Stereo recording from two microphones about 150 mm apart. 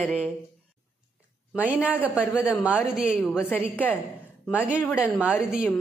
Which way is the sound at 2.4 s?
10° right (ahead or behind).